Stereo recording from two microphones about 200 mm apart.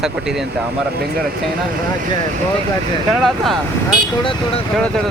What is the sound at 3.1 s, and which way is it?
Speech, centre (ahead or behind).